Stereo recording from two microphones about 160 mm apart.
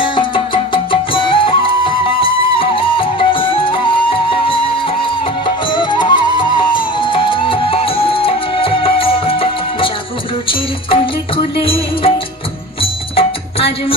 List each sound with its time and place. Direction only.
0.0 s music: 30° left (ahead or behind)
5.7 s music: 30° left (ahead or behind)
10.9 s music: 35° left (ahead or behind)
13.1 s music: 35° left (ahead or behind)